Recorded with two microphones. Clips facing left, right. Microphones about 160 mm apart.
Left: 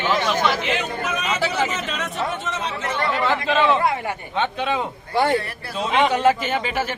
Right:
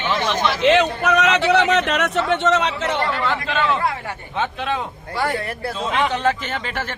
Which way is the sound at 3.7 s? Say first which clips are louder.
Left 2 dB; 20° left (ahead or behind).